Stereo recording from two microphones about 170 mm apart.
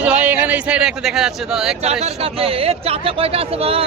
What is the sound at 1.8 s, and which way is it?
Speech, 35° right (ahead or behind).